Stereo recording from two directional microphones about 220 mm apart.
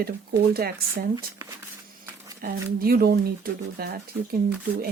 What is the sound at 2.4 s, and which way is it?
Speech, 45° right (ahead or behind).